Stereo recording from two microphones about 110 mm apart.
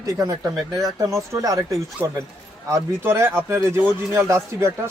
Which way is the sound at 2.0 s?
15° right (ahead or behind).